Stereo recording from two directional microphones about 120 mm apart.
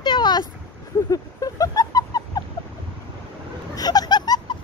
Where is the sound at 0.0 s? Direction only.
40° left (ahead or behind).